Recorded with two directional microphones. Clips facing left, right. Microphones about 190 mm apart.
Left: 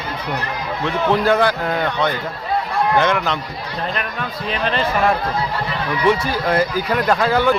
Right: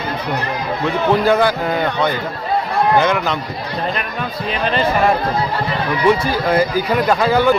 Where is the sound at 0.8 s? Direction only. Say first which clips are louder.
Right 2 dB; 5° right (ahead or behind).